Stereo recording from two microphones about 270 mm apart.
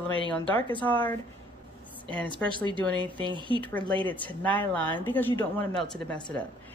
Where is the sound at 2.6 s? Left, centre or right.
Centre.